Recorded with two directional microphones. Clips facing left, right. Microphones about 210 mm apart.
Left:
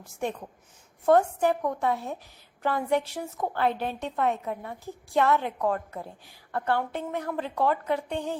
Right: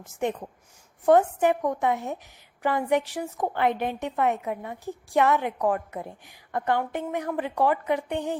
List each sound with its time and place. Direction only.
0.0 s a woman's voice: 20° right (ahead or behind)